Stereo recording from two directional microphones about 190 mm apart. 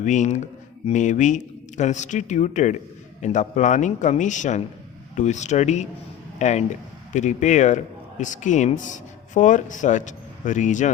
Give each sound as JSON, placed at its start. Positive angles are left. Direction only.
{"t": 0.0, "sound": "speech", "side_deg": 40}